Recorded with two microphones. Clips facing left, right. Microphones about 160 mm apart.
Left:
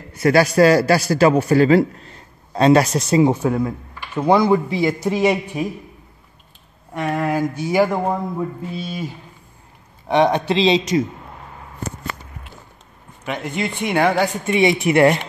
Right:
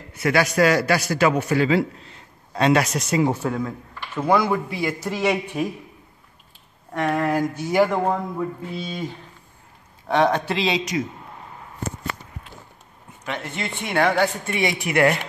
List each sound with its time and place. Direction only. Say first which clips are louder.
0.1 s a man's voice: left 5 dB; 35° left (ahead or behind); by 5.7 s 10° left (ahead or behind)
6.9 s speech: left 1 dB; 5° left (ahead or behind)
8.7 s moo: left 2 dB; 5° left (ahead or behind)
10.0 s speech: left 3 dB; 20° left (ahead or behind)
13.2 s speech: left 5 dB; 15° left (ahead or behind)